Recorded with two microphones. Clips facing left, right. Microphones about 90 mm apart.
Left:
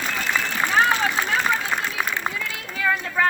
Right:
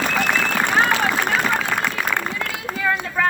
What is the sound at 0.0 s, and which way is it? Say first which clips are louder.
Run: right 5 dB; 65° right (ahead or behind).